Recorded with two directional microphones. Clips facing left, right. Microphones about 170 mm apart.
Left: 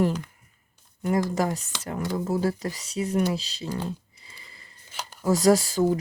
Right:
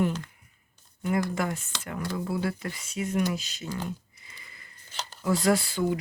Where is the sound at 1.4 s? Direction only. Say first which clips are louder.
Left 4 dB; 40° left (ahead or behind).